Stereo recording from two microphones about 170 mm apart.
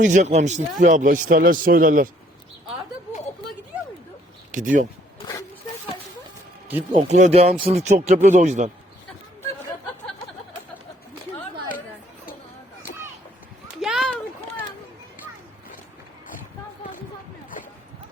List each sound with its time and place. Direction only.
0.0 s a man's voice: 45° right (ahead or behind)
4.5 s a man's voice: 50° right (ahead or behind)
5.2 s a sound: 20° left (ahead or behind)
6.9 s a man's voice: 45° right (ahead or behind)
13.8 s run: 5° right (ahead or behind)